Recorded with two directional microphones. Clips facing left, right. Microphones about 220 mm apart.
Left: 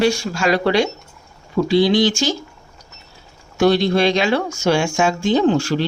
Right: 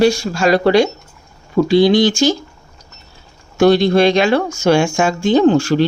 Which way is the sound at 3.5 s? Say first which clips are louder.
Right 4 dB; 50° right (ahead or behind).